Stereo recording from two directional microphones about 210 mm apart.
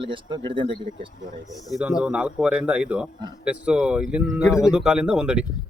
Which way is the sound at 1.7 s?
5° right (ahead or behind).